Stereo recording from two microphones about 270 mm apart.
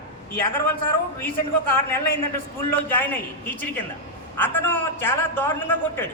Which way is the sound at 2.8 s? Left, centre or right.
Centre.